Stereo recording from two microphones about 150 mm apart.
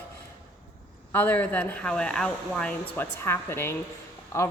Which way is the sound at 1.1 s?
15° left (ahead or behind).